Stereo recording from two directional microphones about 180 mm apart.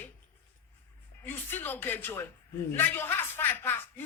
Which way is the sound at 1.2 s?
10° left (ahead or behind).